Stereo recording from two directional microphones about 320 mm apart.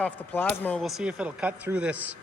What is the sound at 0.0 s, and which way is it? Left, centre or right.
Speech, centre.